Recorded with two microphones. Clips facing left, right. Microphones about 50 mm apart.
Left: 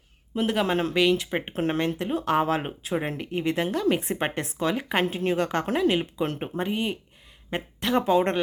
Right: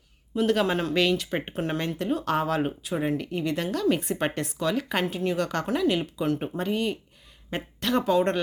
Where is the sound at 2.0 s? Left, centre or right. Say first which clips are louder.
Left 2 dB; left.